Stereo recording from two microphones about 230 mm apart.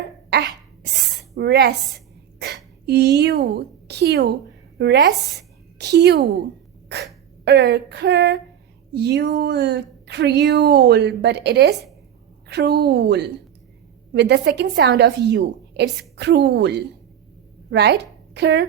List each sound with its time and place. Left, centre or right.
0.3 s cough: right
1.4 s speech: right
2.4 s a sound: right
3.2 s speech: right
5.4 s a sound: right
7.4 s speech: right